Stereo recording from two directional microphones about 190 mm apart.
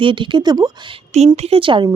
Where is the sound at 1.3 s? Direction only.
30° right (ahead or behind).